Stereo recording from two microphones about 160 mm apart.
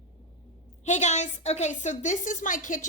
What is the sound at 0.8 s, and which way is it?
Speech, 45° left (ahead or behind).